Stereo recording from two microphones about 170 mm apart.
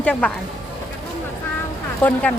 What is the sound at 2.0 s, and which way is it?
Speech, 10° left (ahead or behind).